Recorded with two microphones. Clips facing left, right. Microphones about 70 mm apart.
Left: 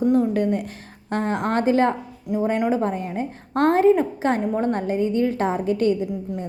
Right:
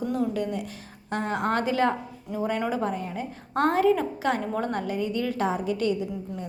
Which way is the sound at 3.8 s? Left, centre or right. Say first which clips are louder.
Left 5 dB; left.